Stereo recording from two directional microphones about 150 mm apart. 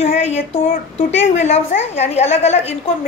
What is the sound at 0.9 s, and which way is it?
A woman's voice, 45° left (ahead or behind).